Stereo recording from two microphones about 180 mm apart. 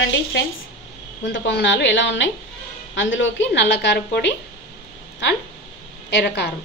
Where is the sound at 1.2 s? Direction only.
75° left (ahead or behind).